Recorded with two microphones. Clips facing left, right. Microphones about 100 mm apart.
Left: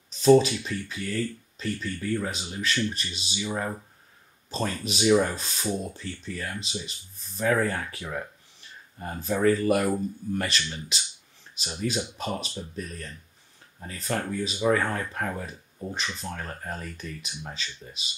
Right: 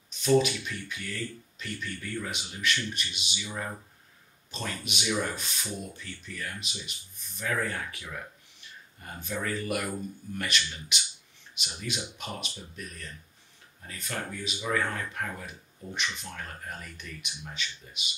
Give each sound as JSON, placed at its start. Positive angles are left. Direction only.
{"t": 0.1, "sound": "speech", "side_deg": 35}
{"t": 13.8, "sound": "speech", "side_deg": 35}